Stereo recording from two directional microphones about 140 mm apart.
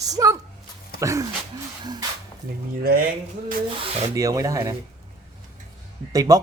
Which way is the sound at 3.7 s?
45° right (ahead or behind).